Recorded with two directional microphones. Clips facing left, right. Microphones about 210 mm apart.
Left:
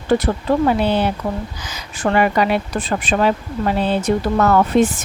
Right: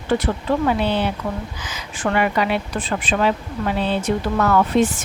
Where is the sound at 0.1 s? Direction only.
40° left (ahead or behind).